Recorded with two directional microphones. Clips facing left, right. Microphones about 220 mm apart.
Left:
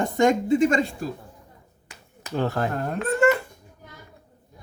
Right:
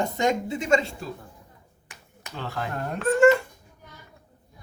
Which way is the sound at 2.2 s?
45° left (ahead or behind).